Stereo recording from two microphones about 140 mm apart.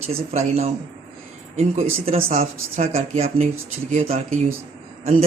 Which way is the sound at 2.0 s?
50° right (ahead or behind).